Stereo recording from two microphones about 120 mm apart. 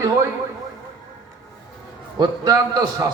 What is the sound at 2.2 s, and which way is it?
Speech, 35° right (ahead or behind).